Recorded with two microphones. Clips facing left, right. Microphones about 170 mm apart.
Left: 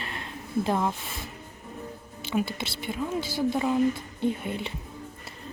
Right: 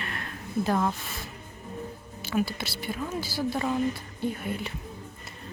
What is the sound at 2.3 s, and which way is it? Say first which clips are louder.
Speech: even; 25° left (ahead or behind).